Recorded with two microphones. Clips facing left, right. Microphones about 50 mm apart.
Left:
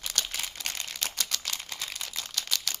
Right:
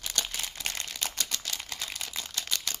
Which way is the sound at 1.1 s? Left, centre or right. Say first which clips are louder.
Left 1 dB; centre.